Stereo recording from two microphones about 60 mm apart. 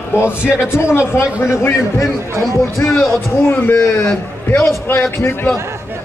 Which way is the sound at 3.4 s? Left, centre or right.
Left.